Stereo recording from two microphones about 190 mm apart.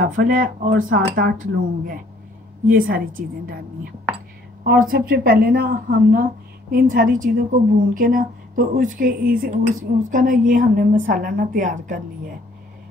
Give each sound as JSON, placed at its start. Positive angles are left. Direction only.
{"t": 0.0, "sound": "speech", "side_deg": -45}
{"t": 4.9, "sound": "speech", "side_deg": -50}